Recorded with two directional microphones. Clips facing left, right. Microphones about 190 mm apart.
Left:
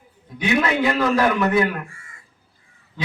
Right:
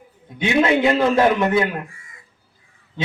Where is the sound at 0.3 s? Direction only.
25° right (ahead or behind).